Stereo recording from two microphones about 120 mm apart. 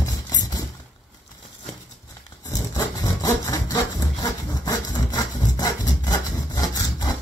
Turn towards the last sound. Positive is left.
turn(degrees=30)  # may be behind; listen again after turning